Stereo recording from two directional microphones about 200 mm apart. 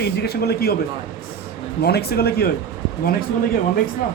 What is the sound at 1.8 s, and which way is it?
Speech, 50° left (ahead or behind).